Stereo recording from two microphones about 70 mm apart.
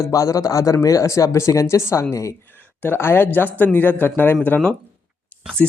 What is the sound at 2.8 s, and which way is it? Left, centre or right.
Speech, left.